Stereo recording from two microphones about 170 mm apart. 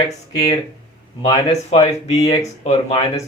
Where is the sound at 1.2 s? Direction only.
35° left (ahead or behind).